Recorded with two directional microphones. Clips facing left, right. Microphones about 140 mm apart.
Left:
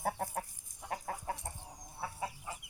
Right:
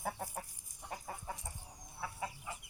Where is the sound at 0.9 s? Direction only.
65° left (ahead or behind).